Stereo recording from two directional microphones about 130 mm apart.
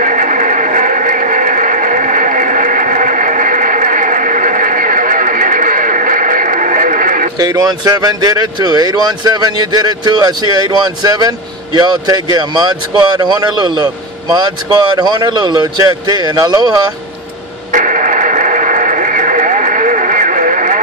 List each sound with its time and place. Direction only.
0.0 s a sound: 75° right (ahead or behind)
7.3 s speech: 30° right (ahead or behind)
17.7 s radio: 80° right